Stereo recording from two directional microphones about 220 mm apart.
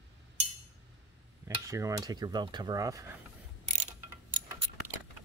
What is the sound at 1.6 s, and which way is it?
Cutlery, 15° right (ahead or behind).